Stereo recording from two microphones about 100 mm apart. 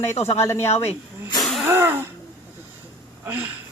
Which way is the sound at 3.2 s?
15° right (ahead or behind).